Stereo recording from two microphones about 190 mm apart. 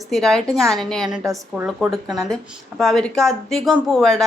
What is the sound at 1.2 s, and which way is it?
Speech, 15° right (ahead or behind).